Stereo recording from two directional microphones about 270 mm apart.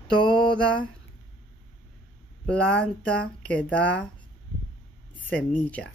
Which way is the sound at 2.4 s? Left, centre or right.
Centre.